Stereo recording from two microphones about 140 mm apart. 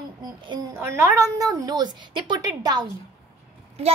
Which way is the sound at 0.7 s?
20° right (ahead or behind).